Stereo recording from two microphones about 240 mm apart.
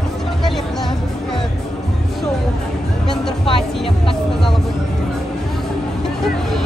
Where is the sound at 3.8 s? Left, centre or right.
Left.